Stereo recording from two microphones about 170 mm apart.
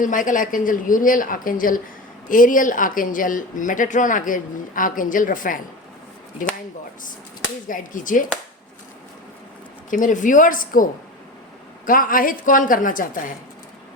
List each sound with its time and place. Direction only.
0.0 s speech: 50° left (ahead or behind)
7.7 s speech: 50° left (ahead or behind)
9.9 s speech: 50° left (ahead or behind)
11.9 s speech: 55° left (ahead or behind)